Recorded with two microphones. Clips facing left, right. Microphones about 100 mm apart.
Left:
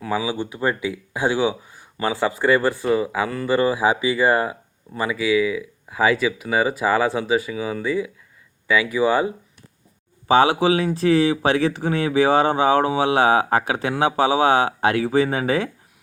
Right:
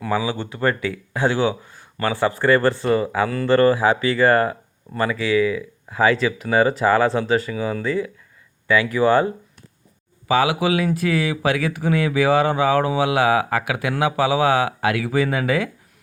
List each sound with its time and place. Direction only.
0.0 s speech: 10° left (ahead or behind)
10.2 s speech: 30° left (ahead or behind)